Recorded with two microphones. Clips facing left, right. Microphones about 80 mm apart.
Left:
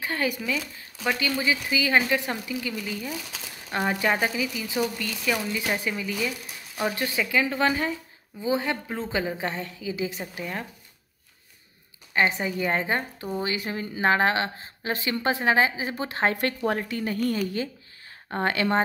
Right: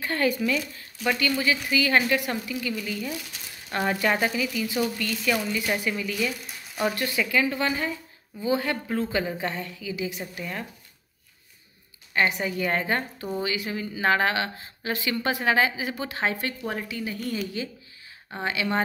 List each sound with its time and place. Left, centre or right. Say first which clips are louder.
0.0 s a woman's voice: right 3 dB; centre
3.7 s a woman's voice: even; centre
7.4 s speech: left 2 dB; left
8.4 s a woman's voice: even; centre
12.1 s a woman's voice: left 1 dB; left
13.4 s speech: even; left
16.3 s a woman's voice: left 5 dB; left